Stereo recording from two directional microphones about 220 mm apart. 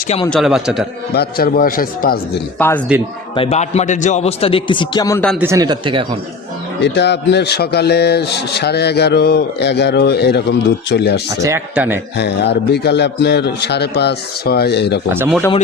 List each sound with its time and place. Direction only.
0.3 s a man's voice: centre (ahead or behind)
1.1 s speech: 45° left (ahead or behind)
2.6 s speech: 10° left (ahead or behind)
3.3 s a man's voice: 25° left (ahead or behind)
5.4 s a man's voice: 15° right (ahead or behind)
6.8 s speech: 50° left (ahead or behind)
11.4 s a man's voice: 10° right (ahead or behind)
12.1 s speech: 50° left (ahead or behind)
15.1 s a man's voice: 10° right (ahead or behind)